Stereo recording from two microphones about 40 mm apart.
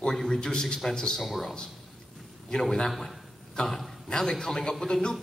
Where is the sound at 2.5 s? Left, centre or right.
Centre.